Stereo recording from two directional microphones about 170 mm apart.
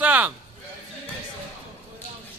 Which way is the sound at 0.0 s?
10° right (ahead or behind).